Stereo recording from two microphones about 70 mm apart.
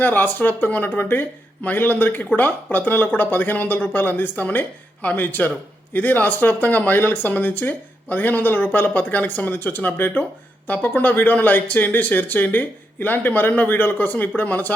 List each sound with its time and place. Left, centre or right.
0.0 s speech: left